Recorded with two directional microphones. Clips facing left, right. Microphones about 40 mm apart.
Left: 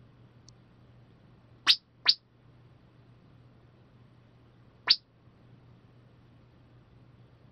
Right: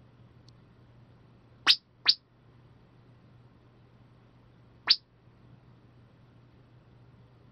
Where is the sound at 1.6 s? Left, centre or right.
Centre.